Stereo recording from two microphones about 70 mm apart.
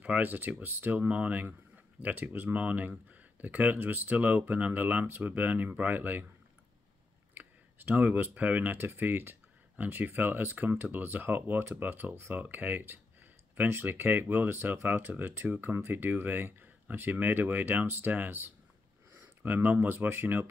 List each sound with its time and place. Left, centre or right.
0.0 s speech: right
7.3 s speech: right
8.7 s speech: right
12.4 s a sound: right
13.8 s speech: right